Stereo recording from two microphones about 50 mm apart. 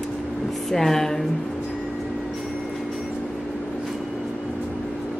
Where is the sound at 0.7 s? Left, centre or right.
Centre.